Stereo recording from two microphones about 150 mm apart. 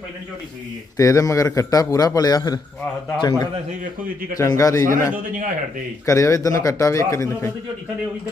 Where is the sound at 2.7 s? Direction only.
5° left (ahead or behind).